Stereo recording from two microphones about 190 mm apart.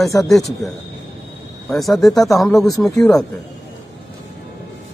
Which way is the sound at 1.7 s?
Centre (ahead or behind).